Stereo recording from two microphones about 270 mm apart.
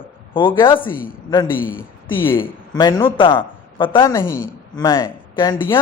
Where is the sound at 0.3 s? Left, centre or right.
Centre.